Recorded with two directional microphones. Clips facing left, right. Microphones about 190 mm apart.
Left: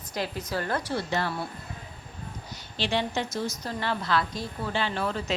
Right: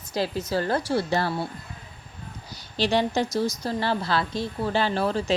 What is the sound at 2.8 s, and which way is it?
A woman's voice, 40° right (ahead or behind).